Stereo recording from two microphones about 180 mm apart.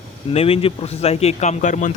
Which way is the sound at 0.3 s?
30° left (ahead or behind).